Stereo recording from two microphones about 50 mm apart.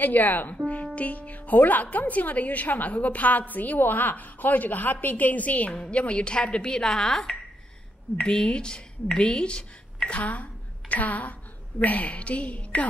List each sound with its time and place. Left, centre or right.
0.0 s a woman's voice: left
5.7 s a woman's voice: centre